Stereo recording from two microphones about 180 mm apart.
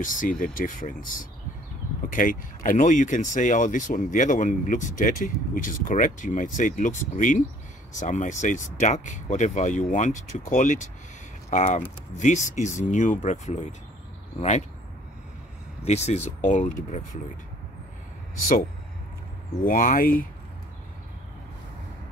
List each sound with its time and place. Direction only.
0.0 s speech: 50° left (ahead or behind)
2.0 s speech: 50° left (ahead or behind)
15.8 s speech: 35° left (ahead or behind)
19.6 s speech: 50° left (ahead or behind)